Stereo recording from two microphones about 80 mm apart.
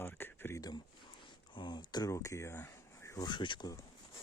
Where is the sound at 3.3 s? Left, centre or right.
Left.